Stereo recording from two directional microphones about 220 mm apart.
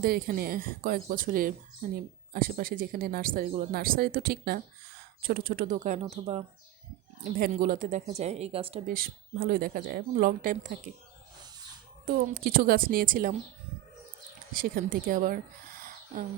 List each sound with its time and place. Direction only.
0.0 s speech: 45° right (ahead or behind)
6.0 s speech: 25° right (ahead or behind)
7.3 s speech: 40° right (ahead or behind); by 8.8 s 25° right (ahead or behind)
8.9 s speech: 40° right (ahead or behind)
12.0 s speech: 40° right (ahead or behind)
14.5 s speech: 40° right (ahead or behind)